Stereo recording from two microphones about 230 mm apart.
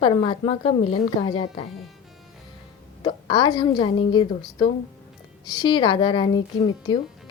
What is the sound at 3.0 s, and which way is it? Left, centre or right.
Speech, left.